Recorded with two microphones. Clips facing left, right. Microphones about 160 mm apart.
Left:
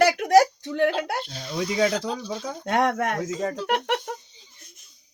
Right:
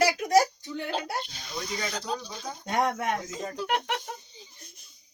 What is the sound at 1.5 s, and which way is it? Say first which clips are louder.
Speech: left 11 dB; 90° left.